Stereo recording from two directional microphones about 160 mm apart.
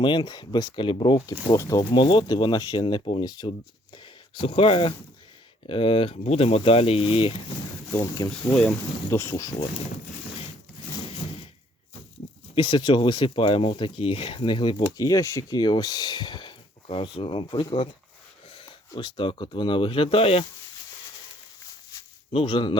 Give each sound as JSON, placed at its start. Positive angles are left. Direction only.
{"t": 0.0, "sound": "speech", "side_deg": 30}
{"t": 8.4, "sound": "speech", "side_deg": 10}
{"t": 12.2, "sound": "a sound", "side_deg": 40}
{"t": 12.5, "sound": "speech", "side_deg": 30}
{"t": 22.3, "sound": "speech", "side_deg": 35}